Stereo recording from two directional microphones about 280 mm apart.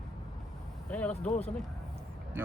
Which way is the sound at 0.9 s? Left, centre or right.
Centre.